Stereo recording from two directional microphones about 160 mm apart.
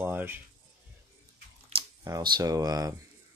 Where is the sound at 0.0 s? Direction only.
15° right (ahead or behind).